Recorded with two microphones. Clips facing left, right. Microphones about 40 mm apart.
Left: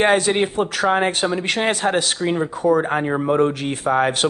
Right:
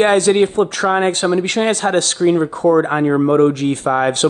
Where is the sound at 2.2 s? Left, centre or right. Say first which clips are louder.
Right 12 dB; centre.